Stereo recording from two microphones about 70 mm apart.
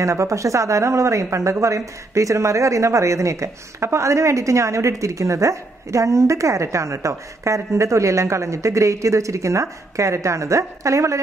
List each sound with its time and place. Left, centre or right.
0.0 s speech: right